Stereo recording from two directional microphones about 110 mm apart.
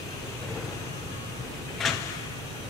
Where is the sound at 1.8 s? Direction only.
Centre (ahead or behind).